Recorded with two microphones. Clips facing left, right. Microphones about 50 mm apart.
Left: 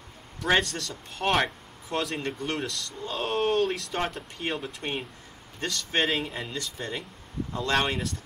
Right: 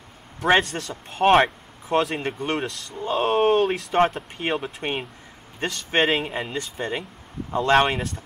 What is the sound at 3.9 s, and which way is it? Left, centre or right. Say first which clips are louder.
Speech: right 10 dB; right.